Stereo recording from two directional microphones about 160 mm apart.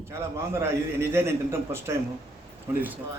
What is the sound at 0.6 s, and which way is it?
A man's voice, 15° right (ahead or behind).